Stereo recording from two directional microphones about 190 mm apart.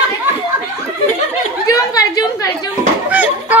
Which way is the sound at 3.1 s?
10° right (ahead or behind).